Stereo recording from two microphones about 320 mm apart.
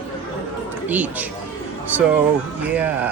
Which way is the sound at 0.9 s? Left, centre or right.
Centre.